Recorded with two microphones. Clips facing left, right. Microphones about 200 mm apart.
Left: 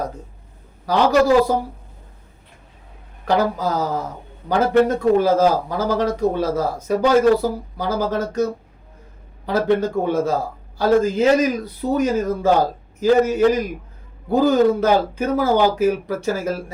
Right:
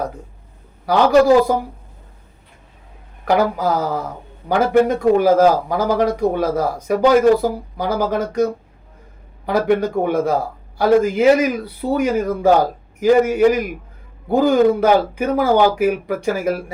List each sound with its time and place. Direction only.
1.4 s a man's voice: 15° right (ahead or behind)
3.2 s a man's voice: 10° right (ahead or behind)
9.5 s a man's voice: 15° right (ahead or behind)